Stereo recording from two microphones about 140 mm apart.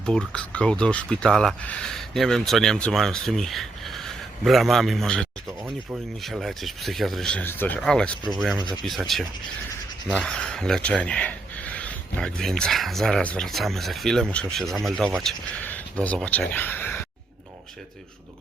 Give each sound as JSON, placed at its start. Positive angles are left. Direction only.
{"t": 0.0, "sound": "speech", "side_deg": 5}
{"t": 5.5, "sound": "speech", "side_deg": -20}
{"t": 6.2, "sound": "speech", "side_deg": 0}